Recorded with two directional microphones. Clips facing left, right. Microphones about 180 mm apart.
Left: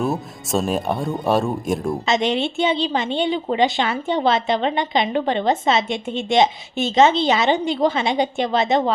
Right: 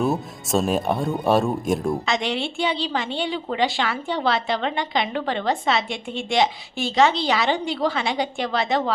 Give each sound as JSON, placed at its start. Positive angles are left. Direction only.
{"t": 0.0, "sound": "speech", "side_deg": 0}
{"t": 2.0, "sound": "a woman's voice", "side_deg": 20}